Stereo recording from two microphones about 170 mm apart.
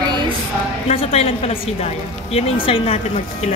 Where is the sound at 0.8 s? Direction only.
35° left (ahead or behind).